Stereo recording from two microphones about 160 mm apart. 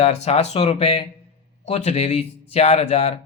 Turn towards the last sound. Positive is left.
turn(degrees=45)  # may be behind; listen again after turning